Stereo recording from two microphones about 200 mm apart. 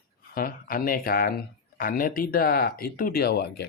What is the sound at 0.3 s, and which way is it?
Speech, 45° left (ahead or behind).